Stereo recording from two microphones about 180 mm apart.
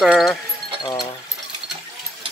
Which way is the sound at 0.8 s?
20° left (ahead or behind).